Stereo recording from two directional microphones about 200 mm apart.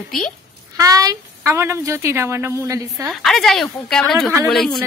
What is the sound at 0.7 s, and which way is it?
A woman's voice, 15° right (ahead or behind).